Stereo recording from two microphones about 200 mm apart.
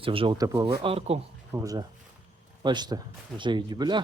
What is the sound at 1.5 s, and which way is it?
Speech, 15° right (ahead or behind).